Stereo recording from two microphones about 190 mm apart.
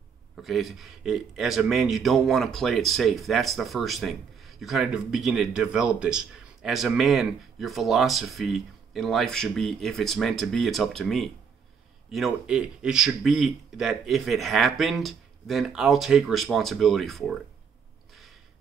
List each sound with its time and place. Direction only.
0.4 s speech: centre (ahead or behind)